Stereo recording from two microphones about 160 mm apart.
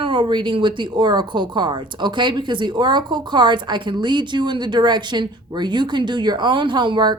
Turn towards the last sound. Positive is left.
turn(degrees=-30)  # may be behind; listen again after turning